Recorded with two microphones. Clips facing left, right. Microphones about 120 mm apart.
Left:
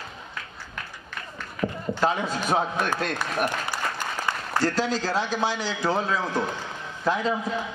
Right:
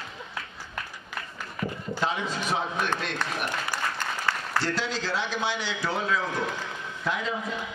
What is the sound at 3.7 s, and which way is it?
Applause, 15° left (ahead or behind).